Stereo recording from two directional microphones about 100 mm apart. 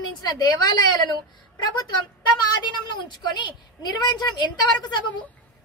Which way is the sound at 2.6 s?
45° left (ahead or behind).